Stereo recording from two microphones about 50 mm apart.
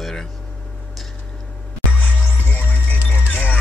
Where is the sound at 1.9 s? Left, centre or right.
Left.